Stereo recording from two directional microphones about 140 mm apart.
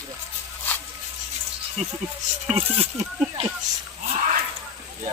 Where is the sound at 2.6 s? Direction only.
45° right (ahead or behind).